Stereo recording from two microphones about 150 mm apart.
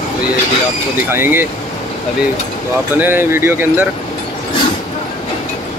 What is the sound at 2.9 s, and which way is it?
Speech, 15° right (ahead or behind).